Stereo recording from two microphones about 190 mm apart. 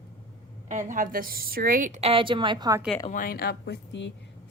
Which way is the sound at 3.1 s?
50° left (ahead or behind).